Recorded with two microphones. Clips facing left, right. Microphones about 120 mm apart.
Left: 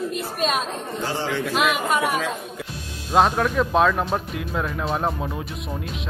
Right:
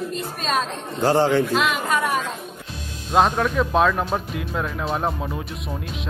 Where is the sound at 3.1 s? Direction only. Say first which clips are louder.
Even; centre (ahead or behind).